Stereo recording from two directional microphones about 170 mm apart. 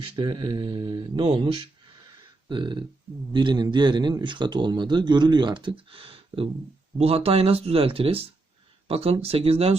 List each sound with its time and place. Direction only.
0.0 s speech: 25° right (ahead or behind)